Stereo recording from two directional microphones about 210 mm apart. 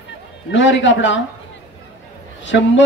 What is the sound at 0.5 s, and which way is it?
Speech, 60° left (ahead or behind).